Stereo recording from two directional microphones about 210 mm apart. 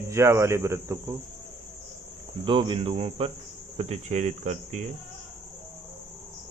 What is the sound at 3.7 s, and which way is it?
Speech, 30° right (ahead or behind).